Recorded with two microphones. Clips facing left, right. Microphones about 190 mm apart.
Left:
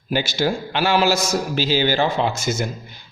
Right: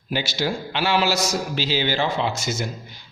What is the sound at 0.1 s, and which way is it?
Speech, 50° left (ahead or behind).